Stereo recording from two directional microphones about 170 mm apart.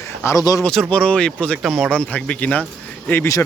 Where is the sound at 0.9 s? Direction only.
5° left (ahead or behind).